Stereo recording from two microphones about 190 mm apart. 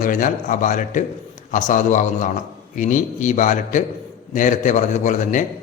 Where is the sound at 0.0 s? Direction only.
45° left (ahead or behind).